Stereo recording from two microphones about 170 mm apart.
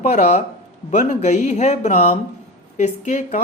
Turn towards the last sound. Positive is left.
turn(degrees=45)  # may be behind; listen again after turning